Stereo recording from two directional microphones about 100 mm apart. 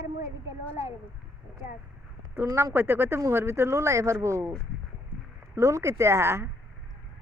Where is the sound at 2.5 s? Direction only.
35° right (ahead or behind).